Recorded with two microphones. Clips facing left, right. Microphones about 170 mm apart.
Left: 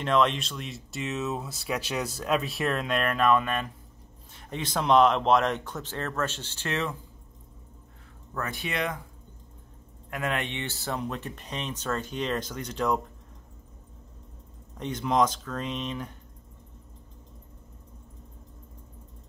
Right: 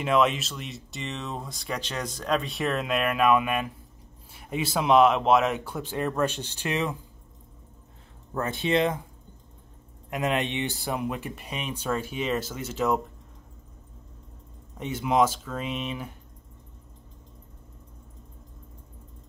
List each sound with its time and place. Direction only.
0.0 s speech: 5° right (ahead or behind)
8.4 s speech: 25° right (ahead or behind)
10.0 s speech: 20° right (ahead or behind); by 13.0 s 5° right (ahead or behind)
14.8 s speech: 5° right (ahead or behind)